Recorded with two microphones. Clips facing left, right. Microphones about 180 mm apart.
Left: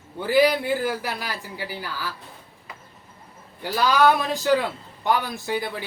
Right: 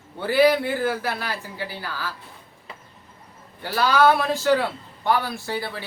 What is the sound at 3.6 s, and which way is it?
Speech, 15° left (ahead or behind).